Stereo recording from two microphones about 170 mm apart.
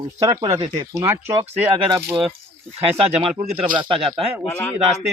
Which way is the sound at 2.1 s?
5° right (ahead or behind).